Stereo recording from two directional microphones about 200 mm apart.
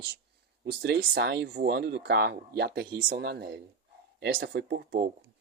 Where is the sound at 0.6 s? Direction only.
60° right (ahead or behind).